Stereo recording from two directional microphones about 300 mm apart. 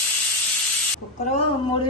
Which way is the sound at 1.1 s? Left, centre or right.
Left.